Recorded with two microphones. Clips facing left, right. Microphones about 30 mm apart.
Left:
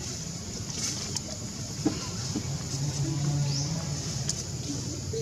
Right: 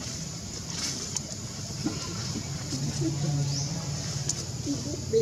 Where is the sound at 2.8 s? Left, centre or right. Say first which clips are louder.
Right 3 dB; centre.